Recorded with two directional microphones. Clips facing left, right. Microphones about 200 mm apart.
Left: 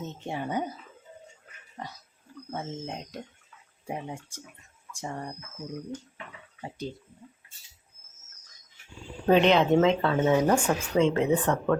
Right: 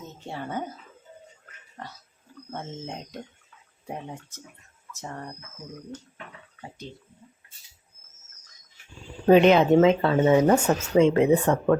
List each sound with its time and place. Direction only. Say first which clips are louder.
0.0 s speech: left 3 dB; 20° left (ahead or behind)
2.5 s speech: left 1 dB; 5° left (ahead or behind)
9.2 s speech: right 4 dB; 5° right (ahead or behind)